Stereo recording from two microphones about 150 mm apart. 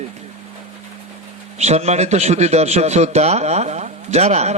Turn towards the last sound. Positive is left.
turn(degrees=-45)  # may be behind; listen again after turning